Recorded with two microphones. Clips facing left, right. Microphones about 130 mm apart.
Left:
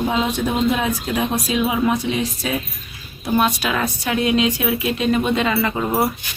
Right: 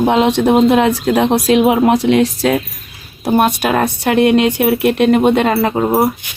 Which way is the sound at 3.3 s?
55° right (ahead or behind).